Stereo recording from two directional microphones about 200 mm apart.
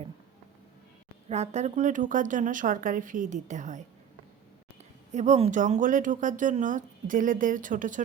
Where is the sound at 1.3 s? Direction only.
35° right (ahead or behind).